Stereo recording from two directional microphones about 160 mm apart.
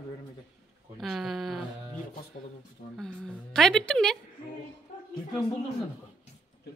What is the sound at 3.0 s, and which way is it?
A woman's voice, 5° left (ahead or behind).